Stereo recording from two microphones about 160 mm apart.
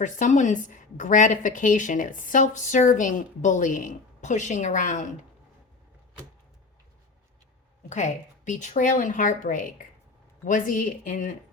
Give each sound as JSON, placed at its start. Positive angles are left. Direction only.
{"t": 0.0, "sound": "a woman's voice", "side_deg": 50}
{"t": 7.9, "sound": "speech", "side_deg": 45}